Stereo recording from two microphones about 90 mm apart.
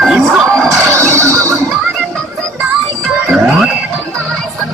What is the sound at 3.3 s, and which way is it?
Music, 10° right (ahead or behind).